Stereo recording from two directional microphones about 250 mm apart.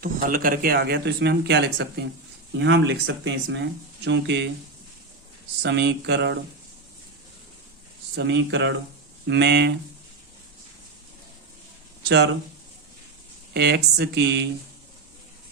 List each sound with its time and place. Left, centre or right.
0.0 s speech: right
5.6 s speech: right
8.1 s speech: right
12.0 s speech: right
13.5 s speech: right